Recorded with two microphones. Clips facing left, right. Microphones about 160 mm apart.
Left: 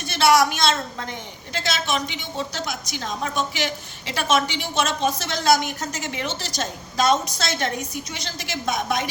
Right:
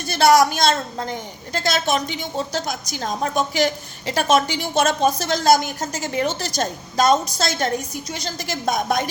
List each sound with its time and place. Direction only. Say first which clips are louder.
0.1 s a woman's voice: right 3 dB; 40° right (ahead or behind)